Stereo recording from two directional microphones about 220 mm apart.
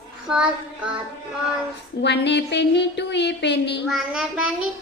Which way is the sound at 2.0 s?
50° left (ahead or behind).